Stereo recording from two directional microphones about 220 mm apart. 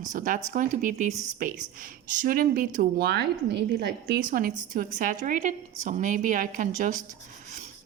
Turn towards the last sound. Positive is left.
turn(degrees=-35)  # may be behind; listen again after turning